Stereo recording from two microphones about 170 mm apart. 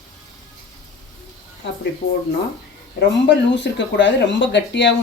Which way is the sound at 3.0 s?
90° left.